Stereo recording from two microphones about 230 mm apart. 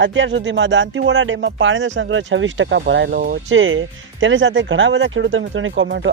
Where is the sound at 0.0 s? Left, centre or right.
Right.